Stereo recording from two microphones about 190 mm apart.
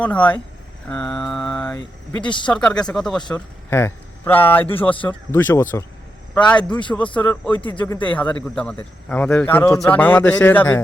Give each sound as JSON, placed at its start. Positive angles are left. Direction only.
{"t": 0.0, "sound": "speech", "side_deg": 10}
{"t": 2.2, "sound": "speech", "side_deg": 25}
{"t": 2.5, "sound": "speech", "side_deg": 5}
{"t": 6.9, "sound": "speech", "side_deg": 5}